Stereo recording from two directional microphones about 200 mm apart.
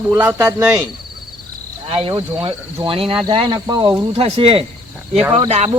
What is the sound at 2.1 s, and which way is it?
Speech, 25° right (ahead or behind).